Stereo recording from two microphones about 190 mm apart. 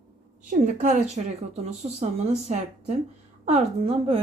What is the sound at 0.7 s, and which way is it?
A woman's voice, 40° right (ahead or behind).